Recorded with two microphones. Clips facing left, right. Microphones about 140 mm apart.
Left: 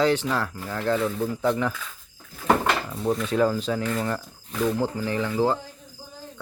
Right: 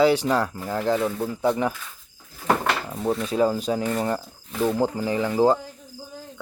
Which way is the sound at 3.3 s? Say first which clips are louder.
Right 2 dB; 10° right (ahead or behind).